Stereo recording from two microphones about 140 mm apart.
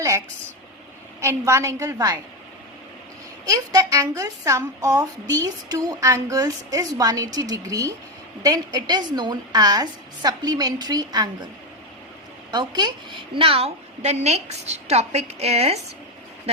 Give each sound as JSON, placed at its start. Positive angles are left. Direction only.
{"t": 1.2, "sound": "a woman's voice", "side_deg": -20}
{"t": 3.4, "sound": "a woman's voice", "side_deg": -25}
{"t": 12.5, "sound": "a woman's voice", "side_deg": -30}